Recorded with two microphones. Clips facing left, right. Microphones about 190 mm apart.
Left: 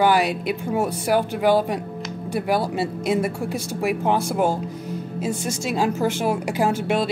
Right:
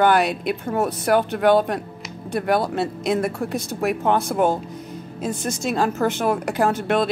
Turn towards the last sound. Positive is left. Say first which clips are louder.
# right 1 dB
turn(degrees=10)  # may be behind; listen again after turning